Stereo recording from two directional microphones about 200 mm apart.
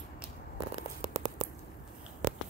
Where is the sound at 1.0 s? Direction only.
35° right (ahead or behind).